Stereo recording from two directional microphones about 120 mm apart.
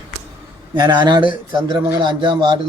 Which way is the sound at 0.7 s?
35° right (ahead or behind).